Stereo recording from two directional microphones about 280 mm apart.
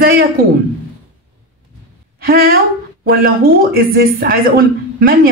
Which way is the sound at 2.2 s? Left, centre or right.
Right.